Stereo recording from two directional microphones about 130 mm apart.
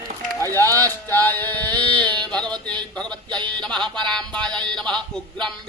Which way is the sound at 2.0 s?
35° right (ahead or behind).